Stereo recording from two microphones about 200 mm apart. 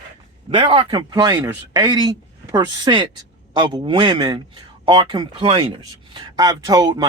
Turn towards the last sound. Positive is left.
turn(degrees=-20)  # may be behind; listen again after turning